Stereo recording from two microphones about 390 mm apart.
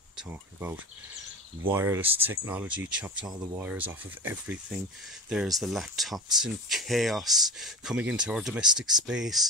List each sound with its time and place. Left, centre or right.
0.3 s speech: centre